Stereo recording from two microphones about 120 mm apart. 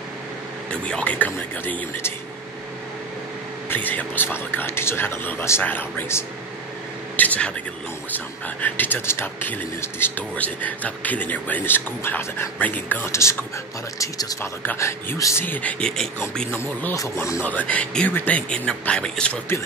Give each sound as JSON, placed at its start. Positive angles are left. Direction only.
{"t": 0.7, "sound": "speech", "side_deg": 10}
{"t": 3.6, "sound": "speech", "side_deg": 15}
{"t": 15.4, "sound": "speech", "side_deg": 15}
{"t": 16.9, "sound": "speech", "side_deg": 25}
{"t": 17.4, "sound": "speech", "side_deg": 15}